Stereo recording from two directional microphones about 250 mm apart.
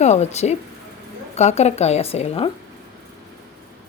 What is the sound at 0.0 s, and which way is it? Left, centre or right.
Speech, left.